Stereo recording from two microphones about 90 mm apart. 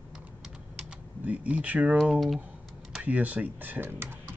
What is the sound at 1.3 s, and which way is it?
Speech, 15° right (ahead or behind).